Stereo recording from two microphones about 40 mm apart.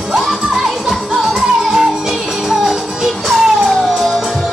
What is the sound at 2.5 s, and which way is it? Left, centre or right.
Music, centre.